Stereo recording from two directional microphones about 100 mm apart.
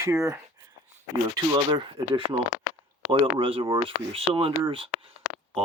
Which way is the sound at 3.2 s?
70° right (ahead or behind).